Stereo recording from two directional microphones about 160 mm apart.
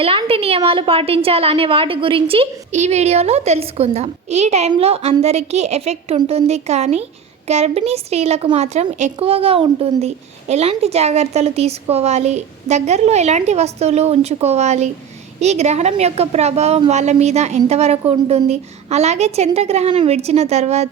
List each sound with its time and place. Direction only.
0.0 s a woman's voice: 35° right (ahead or behind)